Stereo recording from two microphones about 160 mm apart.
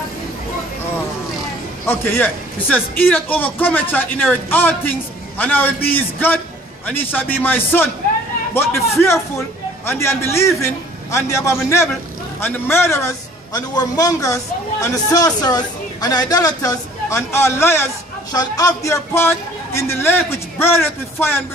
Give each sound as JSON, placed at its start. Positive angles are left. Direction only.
{"t": 1.9, "sound": "a man's voice", "side_deg": 10}